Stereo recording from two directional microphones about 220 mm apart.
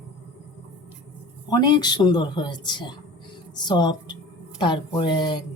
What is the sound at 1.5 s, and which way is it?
A woman's voice, 20° left (ahead or behind).